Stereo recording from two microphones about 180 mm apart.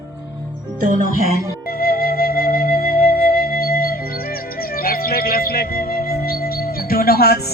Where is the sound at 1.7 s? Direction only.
55° left (ahead or behind).